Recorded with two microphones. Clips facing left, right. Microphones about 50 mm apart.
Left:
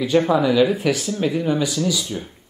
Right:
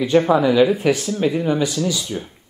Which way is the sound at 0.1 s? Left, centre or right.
Centre.